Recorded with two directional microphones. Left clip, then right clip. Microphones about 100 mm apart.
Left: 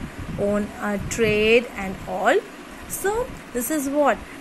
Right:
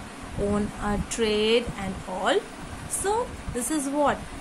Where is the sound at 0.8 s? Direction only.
45° left (ahead or behind).